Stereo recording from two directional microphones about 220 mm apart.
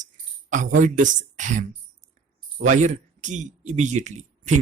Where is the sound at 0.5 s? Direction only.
35° right (ahead or behind).